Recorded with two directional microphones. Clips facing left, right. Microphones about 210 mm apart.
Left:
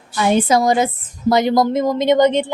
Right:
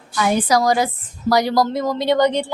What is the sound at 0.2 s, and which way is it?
Speech, 25° left (ahead or behind).